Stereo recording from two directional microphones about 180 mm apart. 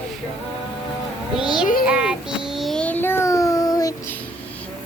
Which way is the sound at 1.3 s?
5° right (ahead or behind).